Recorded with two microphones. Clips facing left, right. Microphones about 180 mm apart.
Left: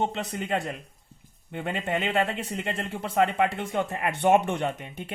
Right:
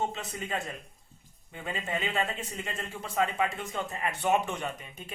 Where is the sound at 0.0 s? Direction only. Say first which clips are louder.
Left 5 dB; 65° left (ahead or behind).